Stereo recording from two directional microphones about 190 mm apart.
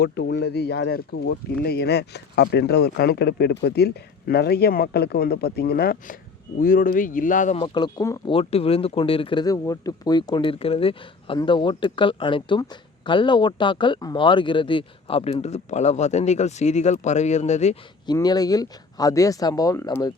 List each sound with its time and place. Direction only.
0.0 s speech: 60° left (ahead or behind); by 7.6 s 40° left (ahead or behind)
7.6 s speech: 25° left (ahead or behind)
8.3 s speech: 30° left (ahead or behind)
18.0 s speech: 20° left (ahead or behind)